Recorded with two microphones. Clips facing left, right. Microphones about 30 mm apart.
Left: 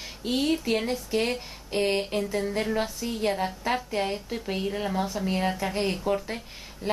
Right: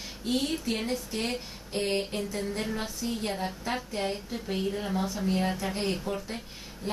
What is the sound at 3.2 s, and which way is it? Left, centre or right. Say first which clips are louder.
A woman's voice: left 5 dB; centre.